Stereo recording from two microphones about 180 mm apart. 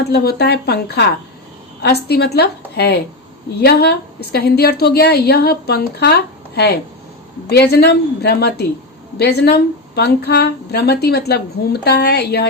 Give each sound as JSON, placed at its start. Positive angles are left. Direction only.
{"t": 0.0, "sound": "a woman's voice", "side_deg": 60}